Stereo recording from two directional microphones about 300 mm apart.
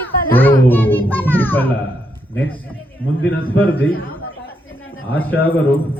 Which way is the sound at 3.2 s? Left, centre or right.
Left.